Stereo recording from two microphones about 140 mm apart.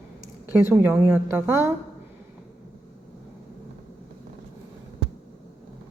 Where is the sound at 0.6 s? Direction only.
15° right (ahead or behind).